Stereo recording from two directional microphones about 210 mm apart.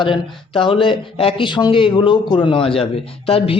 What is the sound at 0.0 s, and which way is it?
Speech, 25° left (ahead or behind).